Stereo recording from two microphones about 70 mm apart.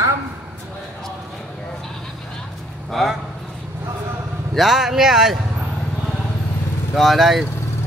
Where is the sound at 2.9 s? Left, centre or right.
Centre.